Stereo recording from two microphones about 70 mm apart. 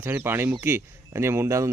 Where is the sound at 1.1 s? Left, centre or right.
Right.